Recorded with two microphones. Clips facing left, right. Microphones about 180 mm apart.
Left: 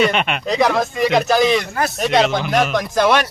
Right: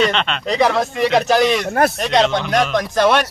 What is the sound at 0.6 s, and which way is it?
Speech, centre (ahead or behind).